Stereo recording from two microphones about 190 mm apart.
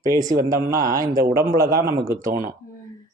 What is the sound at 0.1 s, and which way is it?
A man's voice, 20° right (ahead or behind).